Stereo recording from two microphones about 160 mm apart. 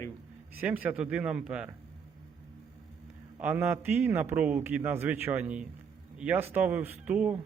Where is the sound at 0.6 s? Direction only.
10° right (ahead or behind).